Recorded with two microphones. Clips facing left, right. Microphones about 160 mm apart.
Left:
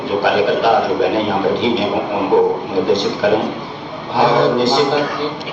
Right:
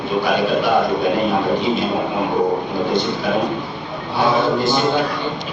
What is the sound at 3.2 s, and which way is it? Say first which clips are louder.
A man's voice: left 4 dB; 90° left.